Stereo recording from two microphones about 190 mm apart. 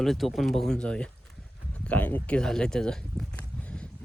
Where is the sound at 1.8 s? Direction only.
10° left (ahead or behind).